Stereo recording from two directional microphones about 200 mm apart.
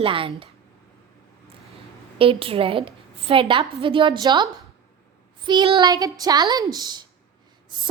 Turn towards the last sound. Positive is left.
turn(degrees=-20)  # may be behind; listen again after turning